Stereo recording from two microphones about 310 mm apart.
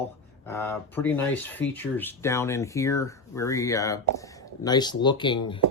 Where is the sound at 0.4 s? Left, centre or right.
Centre.